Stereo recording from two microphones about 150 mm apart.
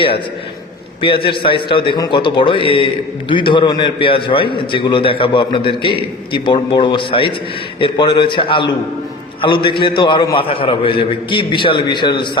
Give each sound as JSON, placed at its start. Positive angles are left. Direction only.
{"t": 1.0, "sound": "a man's voice", "side_deg": 35}